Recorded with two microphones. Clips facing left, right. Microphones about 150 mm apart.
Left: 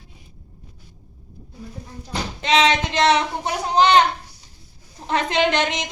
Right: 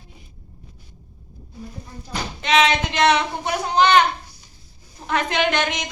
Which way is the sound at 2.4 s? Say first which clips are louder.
Even; 35° left (ahead or behind).